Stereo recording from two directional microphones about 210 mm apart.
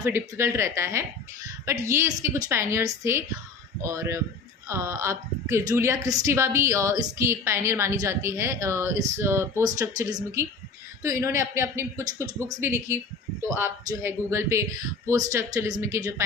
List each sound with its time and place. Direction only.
0.0 s a woman's voice: 10° right (ahead or behind)